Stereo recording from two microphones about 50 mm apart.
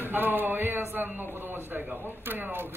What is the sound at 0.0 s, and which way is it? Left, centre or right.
A man's voice, right.